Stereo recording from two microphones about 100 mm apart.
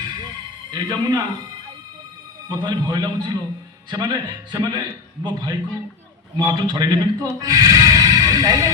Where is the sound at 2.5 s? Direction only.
45° right (ahead or behind).